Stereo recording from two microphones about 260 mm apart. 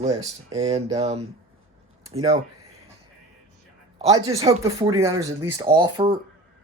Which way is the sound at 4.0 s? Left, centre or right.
Centre.